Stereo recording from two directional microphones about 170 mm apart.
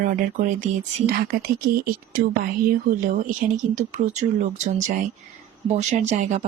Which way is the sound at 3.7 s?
45° right (ahead or behind).